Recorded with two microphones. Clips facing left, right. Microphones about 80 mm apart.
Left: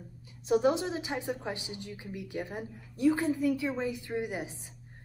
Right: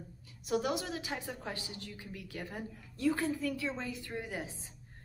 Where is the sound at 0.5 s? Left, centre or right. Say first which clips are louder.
Left 7 dB; left.